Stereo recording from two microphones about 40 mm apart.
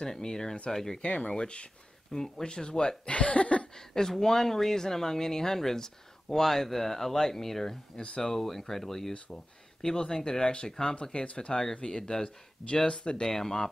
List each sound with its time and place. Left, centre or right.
0.0 s speech: centre
1.0 s speech: left
2.1 s speech: centre; by 3.6 s left
3.7 s speech: centre